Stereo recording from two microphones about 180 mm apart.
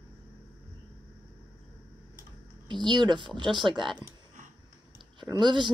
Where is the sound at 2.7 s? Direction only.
25° right (ahead or behind).